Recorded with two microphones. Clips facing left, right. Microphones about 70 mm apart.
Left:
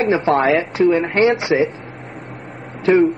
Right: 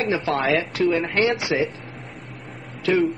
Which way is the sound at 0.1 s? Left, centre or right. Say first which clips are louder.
Left 6 dB; left.